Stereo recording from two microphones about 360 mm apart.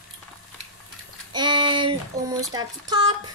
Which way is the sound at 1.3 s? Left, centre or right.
Centre.